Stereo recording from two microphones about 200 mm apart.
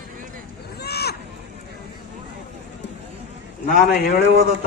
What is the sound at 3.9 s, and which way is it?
Speech, 55° left (ahead or behind).